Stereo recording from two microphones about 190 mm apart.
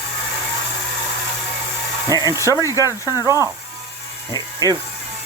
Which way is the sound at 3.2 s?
15° right (ahead or behind).